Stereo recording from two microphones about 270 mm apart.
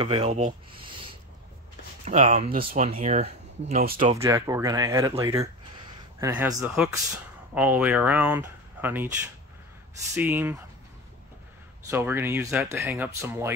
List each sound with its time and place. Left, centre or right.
0.0 s speech: right
2.0 s speech: right; by 9.1 s centre
10.1 s speech: centre
11.9 s speech: centre